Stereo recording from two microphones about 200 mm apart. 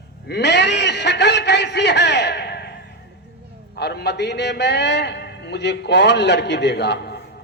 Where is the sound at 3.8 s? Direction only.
55° left (ahead or behind).